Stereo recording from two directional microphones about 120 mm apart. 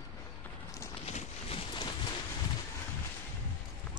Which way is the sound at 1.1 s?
60° left (ahead or behind).